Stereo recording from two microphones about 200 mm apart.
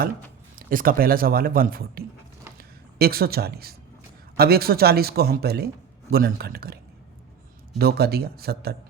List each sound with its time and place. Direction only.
0.7 s a man's voice: 45° right (ahead or behind)
7.8 s a man's voice: 50° right (ahead or behind)